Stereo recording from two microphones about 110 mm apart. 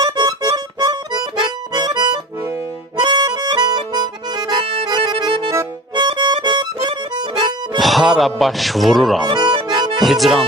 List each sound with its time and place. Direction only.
0.0 s music: 40° right (ahead or behind)
3.0 s accordion: 40° right (ahead or behind)
7.7 s speech: centre (ahead or behind)
9.3 s music: 45° right (ahead or behind)
9.9 s music: centre (ahead or behind)